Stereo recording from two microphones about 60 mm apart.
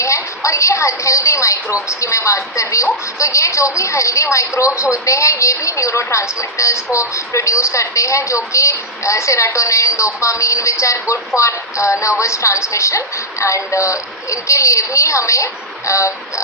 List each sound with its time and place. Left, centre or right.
0.0 s a woman's voice: left